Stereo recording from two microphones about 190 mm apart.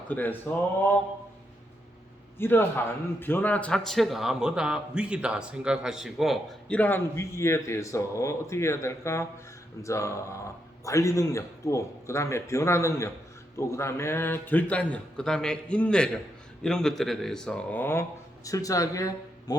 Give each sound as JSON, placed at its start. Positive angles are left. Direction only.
{"t": 0.1, "sound": "a man's voice", "side_deg": 10}
{"t": 2.4, "sound": "a man's voice", "side_deg": 10}